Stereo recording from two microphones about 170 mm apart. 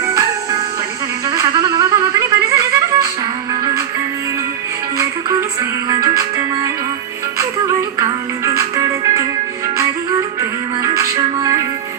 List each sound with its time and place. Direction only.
0.0 s music: 20° right (ahead or behind)
5.9 s music: 20° right (ahead or behind)
10.8 s music: 20° right (ahead or behind)